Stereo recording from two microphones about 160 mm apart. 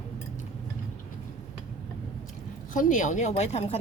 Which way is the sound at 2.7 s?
55° left (ahead or behind).